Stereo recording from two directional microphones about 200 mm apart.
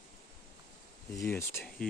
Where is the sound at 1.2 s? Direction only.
10° left (ahead or behind).